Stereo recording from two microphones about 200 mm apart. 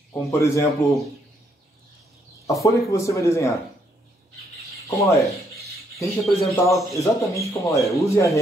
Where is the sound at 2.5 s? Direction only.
15° left (ahead or behind).